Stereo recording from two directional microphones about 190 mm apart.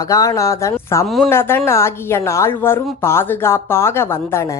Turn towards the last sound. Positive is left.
turn(degrees=15)  # may be behind; listen again after turning